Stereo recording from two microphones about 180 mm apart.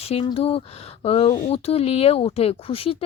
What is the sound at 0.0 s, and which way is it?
Speech, 35° left (ahead or behind).